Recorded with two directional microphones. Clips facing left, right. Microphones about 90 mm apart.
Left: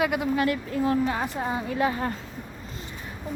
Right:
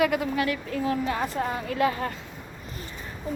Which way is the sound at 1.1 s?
15° left (ahead or behind).